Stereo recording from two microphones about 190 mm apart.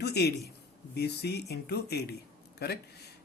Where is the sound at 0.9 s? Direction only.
60° left (ahead or behind).